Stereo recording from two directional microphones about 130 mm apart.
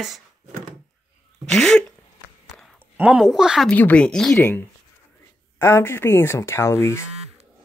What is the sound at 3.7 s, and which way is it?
Speech, 10° left (ahead or behind).